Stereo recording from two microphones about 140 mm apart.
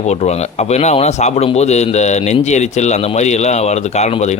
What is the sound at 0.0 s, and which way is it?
Speech, 50° left (ahead or behind).